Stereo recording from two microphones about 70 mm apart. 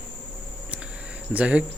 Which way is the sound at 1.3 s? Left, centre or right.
Centre.